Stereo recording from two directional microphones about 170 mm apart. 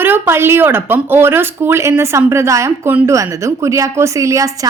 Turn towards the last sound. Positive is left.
turn(degrees=-20)  # may be behind; listen again after turning